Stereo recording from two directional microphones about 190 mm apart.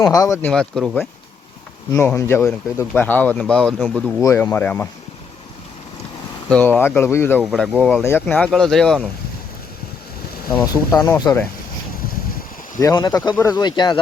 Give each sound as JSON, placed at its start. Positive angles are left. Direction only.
{"t": 0.0, "sound": "speech", "side_deg": 15}
{"t": 0.4, "sound": "speech", "side_deg": 5}
{"t": 1.9, "sound": "speech", "side_deg": 15}
{"t": 4.2, "sound": "speech", "side_deg": 15}
{"t": 6.5, "sound": "speech", "side_deg": 10}
{"t": 10.7, "sound": "speech", "side_deg": 15}
{"t": 12.8, "sound": "speech", "side_deg": 20}